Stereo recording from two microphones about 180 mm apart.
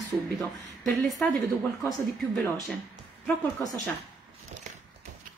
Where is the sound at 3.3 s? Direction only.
20° left (ahead or behind).